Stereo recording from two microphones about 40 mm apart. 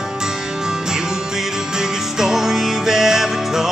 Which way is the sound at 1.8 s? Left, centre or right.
Centre.